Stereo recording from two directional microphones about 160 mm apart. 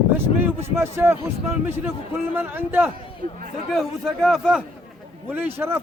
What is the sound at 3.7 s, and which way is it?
A man's voice, centre (ahead or behind).